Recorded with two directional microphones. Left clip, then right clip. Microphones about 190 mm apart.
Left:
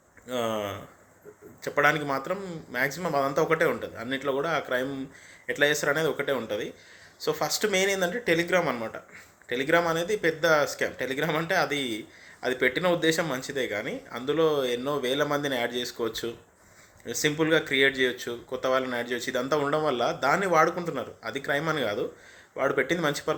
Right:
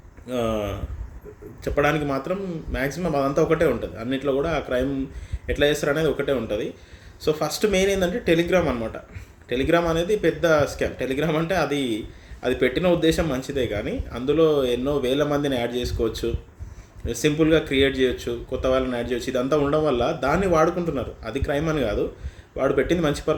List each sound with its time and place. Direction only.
0.3 s speech: 10° right (ahead or behind)
1.6 s speech: 10° right (ahead or behind)
8.2 s speech: 45° left (ahead or behind)
9.5 s speech: 10° right (ahead or behind)